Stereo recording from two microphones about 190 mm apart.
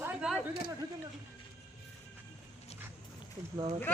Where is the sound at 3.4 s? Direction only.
20° right (ahead or behind).